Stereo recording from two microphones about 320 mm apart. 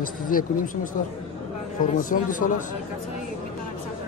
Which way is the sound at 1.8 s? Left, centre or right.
Left.